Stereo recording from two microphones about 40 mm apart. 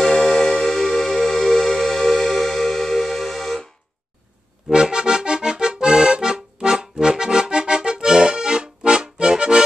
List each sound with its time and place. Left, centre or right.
0.0 s music: centre
4.6 s accordion: centre